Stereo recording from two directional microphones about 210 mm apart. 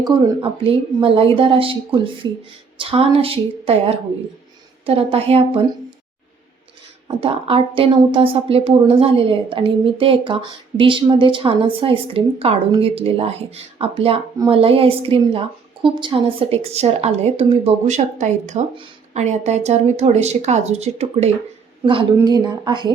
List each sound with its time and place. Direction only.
0.6 s a woman's voice: 25° right (ahead or behind)
7.2 s a woman's voice: 25° right (ahead or behind)